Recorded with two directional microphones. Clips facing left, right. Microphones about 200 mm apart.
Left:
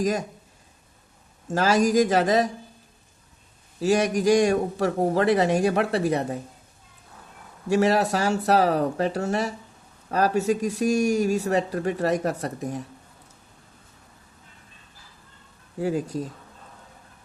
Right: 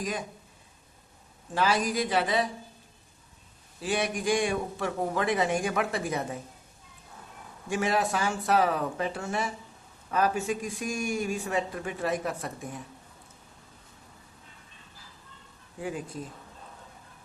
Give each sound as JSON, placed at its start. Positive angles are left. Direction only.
{"t": 0.0, "sound": "speech", "side_deg": 45}
{"t": 1.5, "sound": "speech", "side_deg": 45}
{"t": 3.8, "sound": "speech", "side_deg": 40}
{"t": 7.7, "sound": "speech", "side_deg": 40}
{"t": 15.8, "sound": "speech", "side_deg": 40}